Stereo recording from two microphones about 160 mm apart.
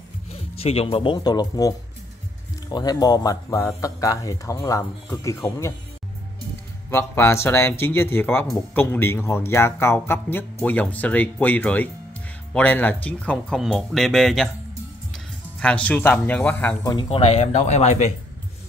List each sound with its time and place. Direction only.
0.3 s speech: 40° left (ahead or behind); by 5.8 s 20° left (ahead or behind)
6.9 s speech: 15° left (ahead or behind)
15.6 s speech: 10° left (ahead or behind)
16.8 s speech: 30° left (ahead or behind)